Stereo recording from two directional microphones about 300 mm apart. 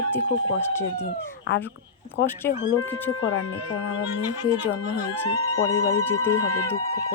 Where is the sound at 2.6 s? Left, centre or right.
Left.